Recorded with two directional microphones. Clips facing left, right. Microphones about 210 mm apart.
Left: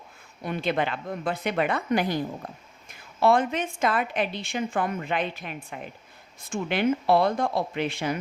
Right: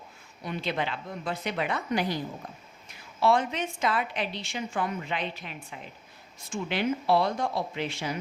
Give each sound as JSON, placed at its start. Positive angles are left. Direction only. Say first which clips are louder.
{"t": 0.4, "sound": "a woman's voice", "louder": "left 4 dB", "side_deg": 55}
{"t": 3.2, "sound": "a woman's voice", "louder": "left 3 dB", "side_deg": 50}